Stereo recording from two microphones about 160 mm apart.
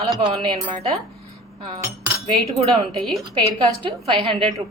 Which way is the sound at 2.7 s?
Centre (ahead or behind).